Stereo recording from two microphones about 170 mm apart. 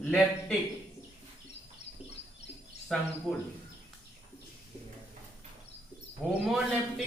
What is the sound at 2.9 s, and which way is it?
Speech, centre (ahead or behind).